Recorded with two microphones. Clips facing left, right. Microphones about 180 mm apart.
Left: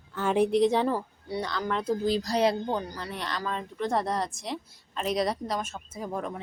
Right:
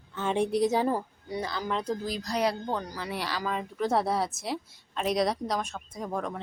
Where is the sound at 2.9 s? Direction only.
5° right (ahead or behind).